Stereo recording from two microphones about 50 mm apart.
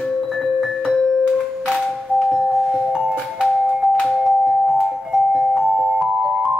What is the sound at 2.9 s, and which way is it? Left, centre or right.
Music, centre.